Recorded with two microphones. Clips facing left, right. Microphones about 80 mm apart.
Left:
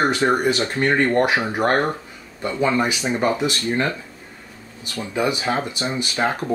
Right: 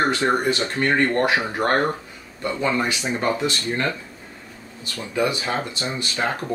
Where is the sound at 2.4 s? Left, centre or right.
Centre.